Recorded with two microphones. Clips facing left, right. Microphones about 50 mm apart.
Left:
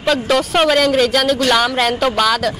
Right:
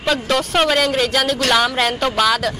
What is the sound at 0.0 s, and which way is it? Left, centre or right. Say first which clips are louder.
A woman's voice: left 3 dB; centre.